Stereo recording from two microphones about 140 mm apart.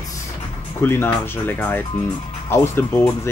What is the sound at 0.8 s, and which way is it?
Speech, 15° left (ahead or behind).